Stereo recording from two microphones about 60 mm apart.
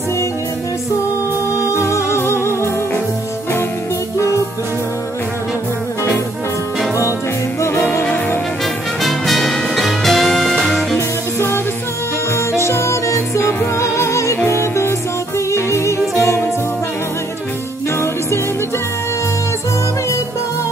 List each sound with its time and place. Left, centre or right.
1.6 s music: left
7.6 s music: left
9.0 s music: centre
11.0 s music: left
17.9 s music: left